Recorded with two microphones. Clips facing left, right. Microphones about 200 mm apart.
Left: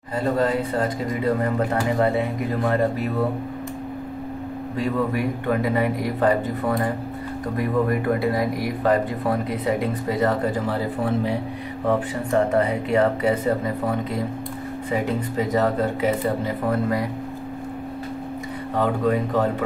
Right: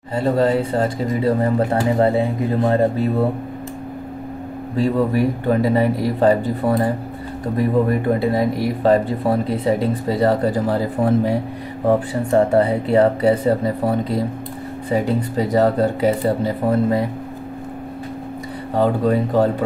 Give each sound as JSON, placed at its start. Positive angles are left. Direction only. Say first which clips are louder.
{"t": 0.1, "sound": "speech", "louder": "right 4 dB", "side_deg": -30}
{"t": 4.7, "sound": "speech", "louder": "right 6 dB", "side_deg": -30}
{"t": 18.8, "sound": "speech", "louder": "right 4 dB", "side_deg": -35}